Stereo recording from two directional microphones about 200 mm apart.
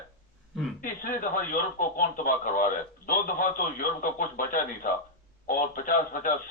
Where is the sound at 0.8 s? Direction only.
45° left (ahead or behind).